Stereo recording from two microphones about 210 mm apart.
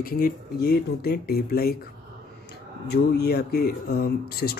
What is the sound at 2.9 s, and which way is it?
Speech, 50° left (ahead or behind).